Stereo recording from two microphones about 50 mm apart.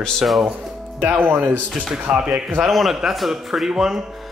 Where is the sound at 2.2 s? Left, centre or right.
Centre.